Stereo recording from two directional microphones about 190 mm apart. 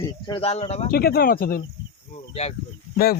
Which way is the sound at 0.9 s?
55° left (ahead or behind).